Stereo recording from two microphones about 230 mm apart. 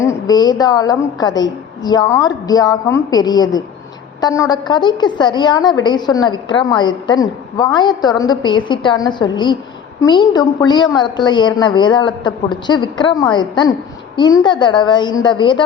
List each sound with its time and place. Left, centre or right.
0.0 s a woman's voice: centre